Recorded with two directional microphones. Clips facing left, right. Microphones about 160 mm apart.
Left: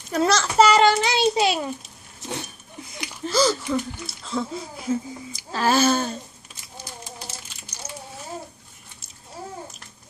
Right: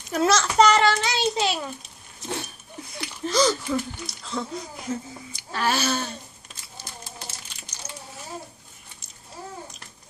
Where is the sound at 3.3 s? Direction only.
5° left (ahead or behind).